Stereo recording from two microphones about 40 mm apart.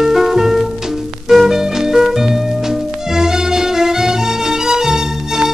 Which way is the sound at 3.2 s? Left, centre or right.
Centre.